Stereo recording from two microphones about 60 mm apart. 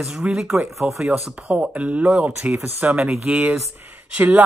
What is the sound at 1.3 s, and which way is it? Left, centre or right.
Speech, right.